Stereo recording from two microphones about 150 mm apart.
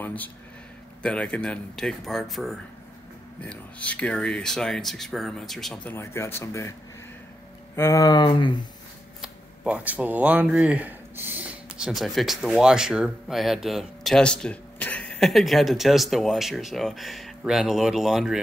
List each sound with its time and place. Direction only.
0.0 s speech: 10° left (ahead or behind)
5.9 s speech: 15° left (ahead or behind)
7.7 s speech: 20° left (ahead or behind)
9.2 s a sound: 5° right (ahead or behind)
11.9 s speech: centre (ahead or behind)